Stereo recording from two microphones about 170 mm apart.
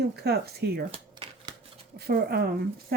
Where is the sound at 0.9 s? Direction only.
30° right (ahead or behind).